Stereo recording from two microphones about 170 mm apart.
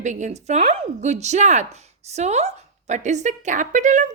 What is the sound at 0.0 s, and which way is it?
A woman's voice, 45° right (ahead or behind).